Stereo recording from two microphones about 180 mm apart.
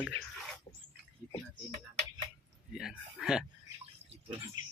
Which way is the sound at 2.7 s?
Centre (ahead or behind).